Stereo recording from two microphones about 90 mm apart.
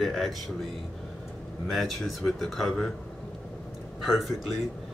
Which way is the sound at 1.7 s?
Centre (ahead or behind).